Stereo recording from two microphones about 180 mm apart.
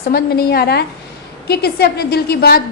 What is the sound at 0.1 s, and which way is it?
A woman's voice, 60° left (ahead or behind).